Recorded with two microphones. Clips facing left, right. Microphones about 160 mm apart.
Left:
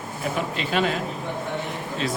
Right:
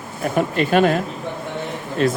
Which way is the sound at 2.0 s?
55° right (ahead or behind).